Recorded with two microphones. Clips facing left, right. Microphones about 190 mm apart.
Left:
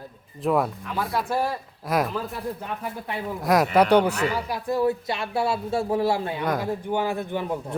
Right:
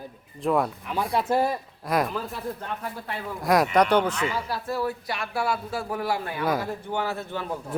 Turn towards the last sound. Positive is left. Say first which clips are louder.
# left 4 dB
turn(degrees=15)  # may be behind; listen again after turning